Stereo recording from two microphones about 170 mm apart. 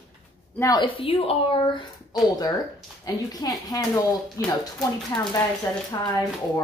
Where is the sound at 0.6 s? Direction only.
25° left (ahead or behind).